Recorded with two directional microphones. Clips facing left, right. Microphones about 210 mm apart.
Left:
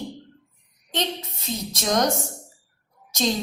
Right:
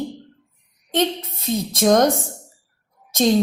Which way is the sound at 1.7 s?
50° right (ahead or behind).